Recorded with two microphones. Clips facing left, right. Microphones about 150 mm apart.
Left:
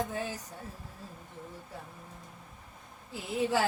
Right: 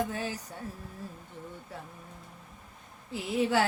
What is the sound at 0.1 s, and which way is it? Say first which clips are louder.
Music: right 1 dB; 75° right (ahead or behind).